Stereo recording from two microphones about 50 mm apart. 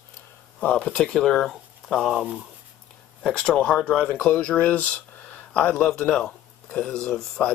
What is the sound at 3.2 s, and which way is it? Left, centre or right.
Speech, centre.